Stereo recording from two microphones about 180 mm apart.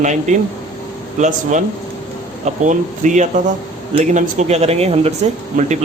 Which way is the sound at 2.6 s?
45° right (ahead or behind).